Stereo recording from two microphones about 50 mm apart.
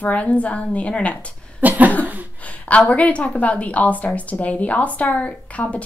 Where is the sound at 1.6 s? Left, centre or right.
Right.